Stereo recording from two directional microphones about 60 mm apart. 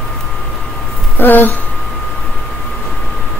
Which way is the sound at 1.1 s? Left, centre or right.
Left.